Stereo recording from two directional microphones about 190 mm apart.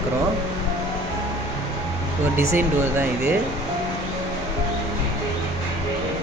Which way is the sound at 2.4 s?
10° right (ahead or behind).